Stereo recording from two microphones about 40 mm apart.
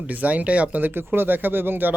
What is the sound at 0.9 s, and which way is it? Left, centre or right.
Speech, right.